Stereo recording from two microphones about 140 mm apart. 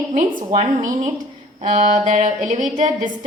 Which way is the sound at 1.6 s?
55° right (ahead or behind).